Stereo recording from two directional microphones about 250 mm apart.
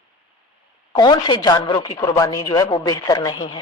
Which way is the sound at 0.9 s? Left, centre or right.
Centre.